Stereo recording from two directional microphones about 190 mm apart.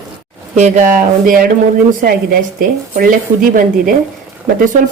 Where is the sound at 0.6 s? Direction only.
45° right (ahead or behind).